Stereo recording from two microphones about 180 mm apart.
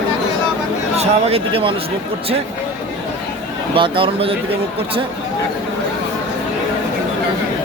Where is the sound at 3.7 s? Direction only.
30° right (ahead or behind).